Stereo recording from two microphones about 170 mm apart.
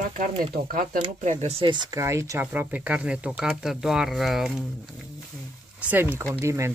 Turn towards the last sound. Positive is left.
turn(degrees=-15)  # may be behind; listen again after turning